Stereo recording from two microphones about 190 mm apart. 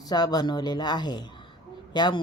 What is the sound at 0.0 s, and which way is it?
Speech, 20° left (ahead or behind).